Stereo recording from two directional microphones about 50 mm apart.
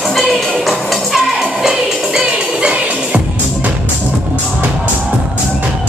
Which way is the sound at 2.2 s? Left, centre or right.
Centre.